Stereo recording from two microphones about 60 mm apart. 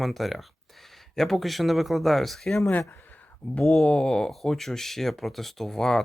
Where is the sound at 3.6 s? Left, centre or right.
Centre.